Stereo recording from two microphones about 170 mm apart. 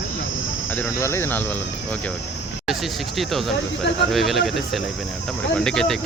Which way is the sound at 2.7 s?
Centre (ahead or behind).